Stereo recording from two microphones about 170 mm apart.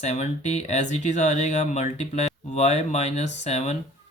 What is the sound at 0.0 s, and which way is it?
Speech, 40° left (ahead or behind).